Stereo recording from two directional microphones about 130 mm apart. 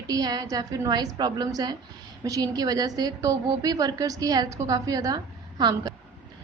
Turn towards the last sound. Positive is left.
turn(degrees=-30)  # may be behind; listen again after turning